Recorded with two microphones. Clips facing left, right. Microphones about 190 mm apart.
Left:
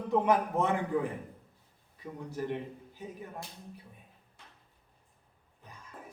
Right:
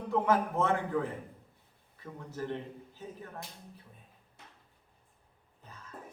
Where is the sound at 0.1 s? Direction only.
15° left (ahead or behind).